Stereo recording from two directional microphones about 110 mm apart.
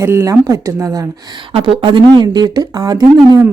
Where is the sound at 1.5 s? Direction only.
55° right (ahead or behind); by 3.4 s 35° right (ahead or behind).